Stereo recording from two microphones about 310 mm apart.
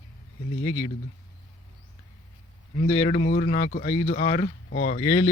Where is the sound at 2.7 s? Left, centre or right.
Centre.